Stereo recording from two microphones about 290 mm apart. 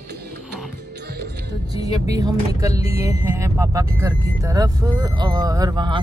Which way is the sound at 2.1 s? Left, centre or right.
Centre.